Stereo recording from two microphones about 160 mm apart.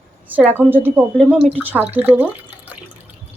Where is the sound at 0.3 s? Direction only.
10° right (ahead or behind).